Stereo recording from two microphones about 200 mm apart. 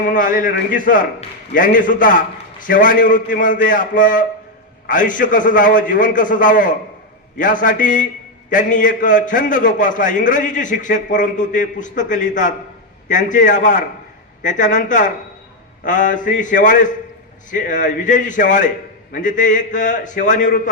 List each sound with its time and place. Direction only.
0.0 s a man's voice: 40° left (ahead or behind)